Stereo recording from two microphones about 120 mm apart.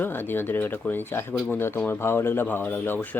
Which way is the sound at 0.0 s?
15° left (ahead or behind).